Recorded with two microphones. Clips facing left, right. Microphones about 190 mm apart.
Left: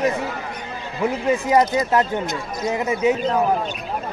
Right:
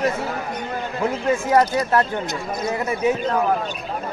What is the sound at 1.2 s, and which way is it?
Speech, 15° left (ahead or behind).